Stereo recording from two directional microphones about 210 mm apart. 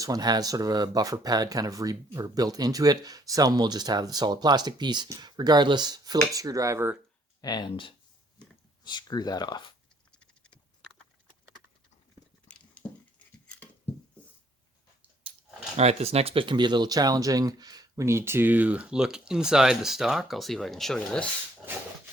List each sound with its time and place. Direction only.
0.0 s speech: 20° right (ahead or behind)
7.4 s speech: 20° left (ahead or behind)
10.1 s a sound: 5° left (ahead or behind)
12.7 s dog: 5° left (ahead or behind)
15.7 s speech: 30° right (ahead or behind); by 21.2 s 5° left (ahead or behind)